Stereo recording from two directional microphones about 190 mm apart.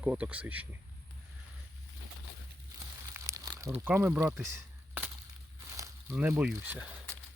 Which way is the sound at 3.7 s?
10° right (ahead or behind).